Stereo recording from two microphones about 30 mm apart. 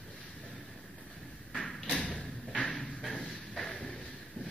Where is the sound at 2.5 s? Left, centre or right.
Left.